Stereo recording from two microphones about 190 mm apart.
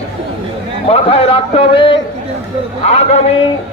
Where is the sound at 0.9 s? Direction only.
30° left (ahead or behind).